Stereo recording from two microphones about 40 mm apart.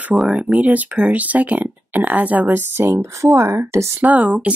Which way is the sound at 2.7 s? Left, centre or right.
Right.